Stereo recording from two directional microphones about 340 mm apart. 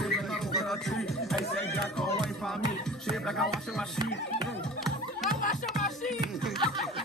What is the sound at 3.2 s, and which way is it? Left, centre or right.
Music, centre.